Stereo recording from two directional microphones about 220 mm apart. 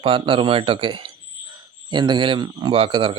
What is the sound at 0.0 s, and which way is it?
Speech, 25° right (ahead or behind).